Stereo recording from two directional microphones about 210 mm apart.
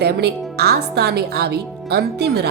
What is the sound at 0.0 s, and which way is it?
Speech, 50° right (ahead or behind).